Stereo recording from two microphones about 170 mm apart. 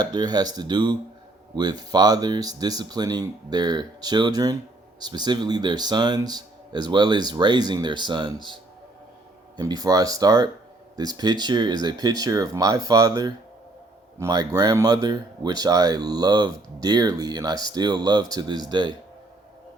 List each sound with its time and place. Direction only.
0.0 s speech: 25° right (ahead or behind)
9.6 s speech: 25° right (ahead or behind)